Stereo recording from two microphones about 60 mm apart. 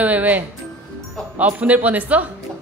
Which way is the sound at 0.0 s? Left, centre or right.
Right.